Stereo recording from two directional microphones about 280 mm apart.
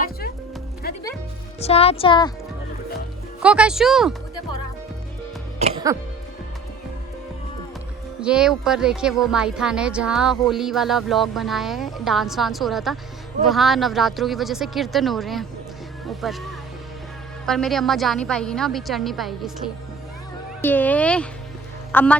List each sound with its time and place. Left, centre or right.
0.8 s music: left
1.5 s speech: left
3.4 s speech: centre
5.9 s speech: centre
8.2 s speech: centre
20.6 s speech: centre